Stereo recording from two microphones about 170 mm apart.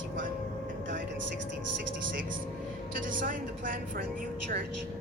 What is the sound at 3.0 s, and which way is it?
A woman's voice, 55° right (ahead or behind).